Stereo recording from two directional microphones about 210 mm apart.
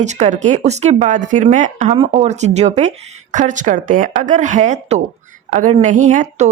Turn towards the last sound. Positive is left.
turn(degrees=-35)  # may be behind; listen again after turning